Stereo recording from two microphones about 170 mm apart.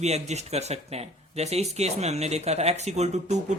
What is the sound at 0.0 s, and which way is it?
Speech, 40° right (ahead or behind).